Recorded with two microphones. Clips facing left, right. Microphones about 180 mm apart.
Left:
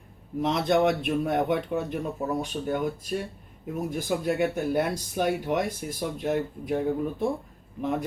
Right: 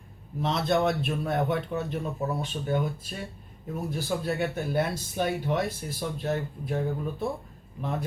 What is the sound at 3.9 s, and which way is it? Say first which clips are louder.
Speech: left 2 dB; 10° left (ahead or behind).